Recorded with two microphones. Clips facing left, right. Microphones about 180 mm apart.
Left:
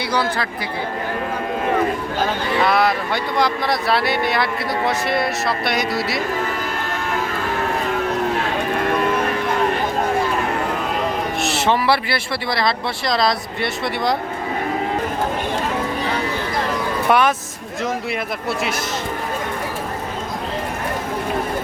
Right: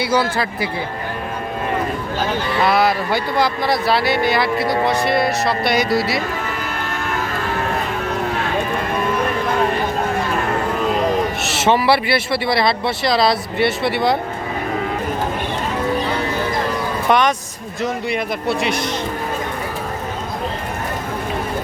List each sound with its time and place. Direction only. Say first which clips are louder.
0.0 s speech: right 3 dB; 5° right (ahead or behind)
2.6 s speech: right 1 dB; centre (ahead or behind)
11.4 s speech: right 1 dB; centre (ahead or behind)
17.1 s speech: right 1 dB; 5° left (ahead or behind)